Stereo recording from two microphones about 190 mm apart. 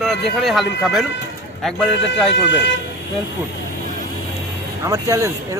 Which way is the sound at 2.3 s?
70° left (ahead or behind).